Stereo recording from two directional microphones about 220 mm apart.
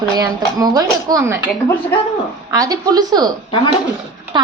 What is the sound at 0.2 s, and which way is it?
A woman's voice, 15° right (ahead or behind).